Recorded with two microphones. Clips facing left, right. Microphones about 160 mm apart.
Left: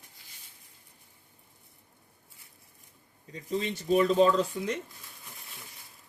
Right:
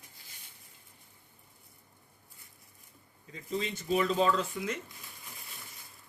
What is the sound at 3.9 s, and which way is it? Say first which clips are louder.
Speech: left 5 dB; 40° left (ahead or behind).